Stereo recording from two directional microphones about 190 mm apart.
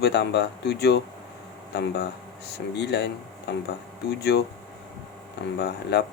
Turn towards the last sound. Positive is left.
turn(degrees=60)  # may be behind; listen again after turning